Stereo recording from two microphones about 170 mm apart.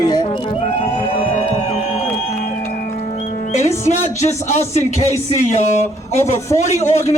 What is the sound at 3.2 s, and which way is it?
Music, 45° left (ahead or behind).